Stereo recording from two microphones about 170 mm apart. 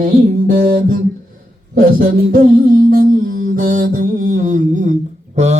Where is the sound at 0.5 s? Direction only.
55° right (ahead or behind).